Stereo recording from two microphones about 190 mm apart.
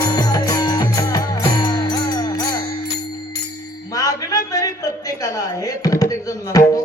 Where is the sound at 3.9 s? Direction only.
20° left (ahead or behind).